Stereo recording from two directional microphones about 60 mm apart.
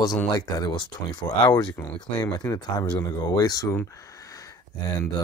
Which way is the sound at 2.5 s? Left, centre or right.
Left.